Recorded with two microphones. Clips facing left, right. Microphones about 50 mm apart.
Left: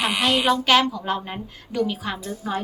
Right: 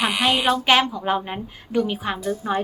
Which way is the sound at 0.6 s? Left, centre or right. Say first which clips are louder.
Even; right.